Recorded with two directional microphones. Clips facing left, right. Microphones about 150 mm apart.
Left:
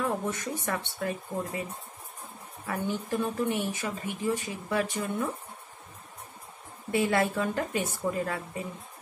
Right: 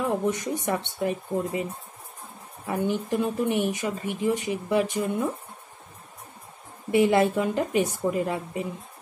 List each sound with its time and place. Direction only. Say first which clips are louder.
0.0 s speech: right 5 dB; 15° right (ahead or behind)
6.9 s a woman's voice: right 6 dB; 20° right (ahead or behind)